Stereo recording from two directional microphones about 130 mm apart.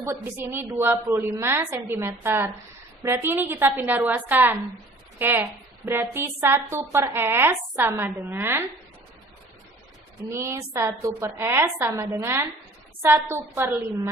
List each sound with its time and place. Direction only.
0.0 s a woman's voice: 20° right (ahead or behind)
10.3 s a woman's voice: 20° right (ahead or behind)